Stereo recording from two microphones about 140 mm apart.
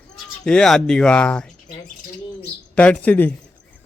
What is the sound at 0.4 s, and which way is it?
Speech, 5° left (ahead or behind).